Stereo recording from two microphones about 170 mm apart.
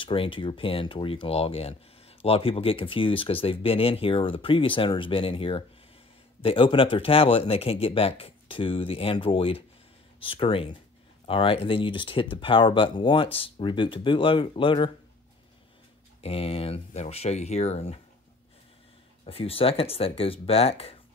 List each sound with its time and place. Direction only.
0.0 s speech: 30° left (ahead or behind)
16.2 s speech: 35° left (ahead or behind)
19.2 s speech: 35° left (ahead or behind)